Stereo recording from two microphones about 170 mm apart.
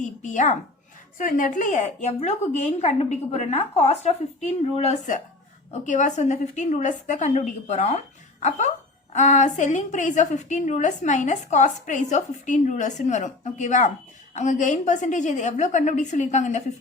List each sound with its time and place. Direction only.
0.0 s a woman's voice: 45° left (ahead or behind)